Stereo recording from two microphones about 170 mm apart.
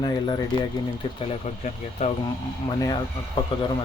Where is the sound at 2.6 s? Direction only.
25° left (ahead or behind).